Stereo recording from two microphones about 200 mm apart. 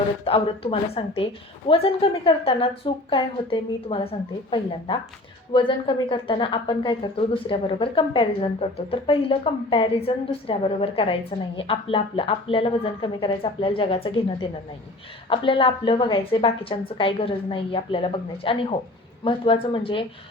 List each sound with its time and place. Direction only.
0.3 s a woman's voice: 30° left (ahead or behind)
15.3 s a woman's voice: 25° left (ahead or behind)